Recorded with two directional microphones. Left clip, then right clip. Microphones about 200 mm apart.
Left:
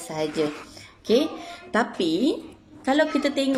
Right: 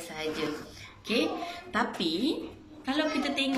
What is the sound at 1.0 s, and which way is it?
A woman's voice, 35° left (ahead or behind).